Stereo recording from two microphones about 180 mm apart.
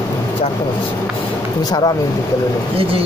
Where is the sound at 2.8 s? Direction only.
30° right (ahead or behind).